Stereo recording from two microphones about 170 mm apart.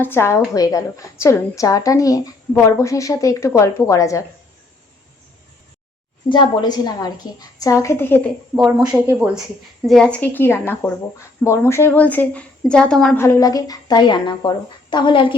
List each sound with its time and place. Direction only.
0.0 s a woman's voice: 15° left (ahead or behind)
6.2 s a woman's voice: 30° left (ahead or behind)
8.9 s speech: 10° right (ahead or behind)
9.8 s speech: 5° left (ahead or behind)
13.2 s a woman's voice: 20° left (ahead or behind)